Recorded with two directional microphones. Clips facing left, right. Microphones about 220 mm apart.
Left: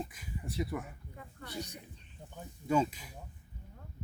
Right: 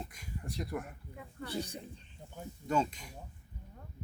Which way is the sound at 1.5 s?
30° right (ahead or behind).